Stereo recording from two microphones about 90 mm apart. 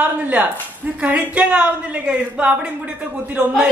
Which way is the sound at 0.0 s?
15° right (ahead or behind).